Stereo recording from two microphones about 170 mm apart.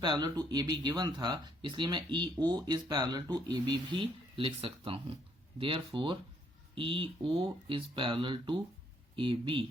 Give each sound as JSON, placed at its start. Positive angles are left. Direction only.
{"t": 0.0, "sound": "speech", "side_deg": -25}